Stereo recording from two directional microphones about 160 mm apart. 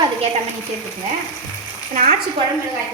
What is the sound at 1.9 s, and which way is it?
Speech, 55° right (ahead or behind).